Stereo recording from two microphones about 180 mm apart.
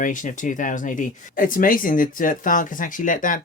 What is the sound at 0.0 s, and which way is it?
Speech, 45° left (ahead or behind).